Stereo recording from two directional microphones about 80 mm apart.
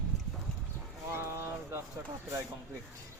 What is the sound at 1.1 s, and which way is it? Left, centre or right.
Speech, right.